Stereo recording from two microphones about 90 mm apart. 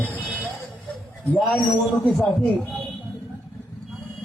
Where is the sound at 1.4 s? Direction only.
Centre (ahead or behind).